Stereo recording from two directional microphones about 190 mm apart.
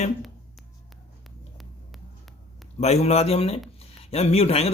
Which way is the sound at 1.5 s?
Centre (ahead or behind).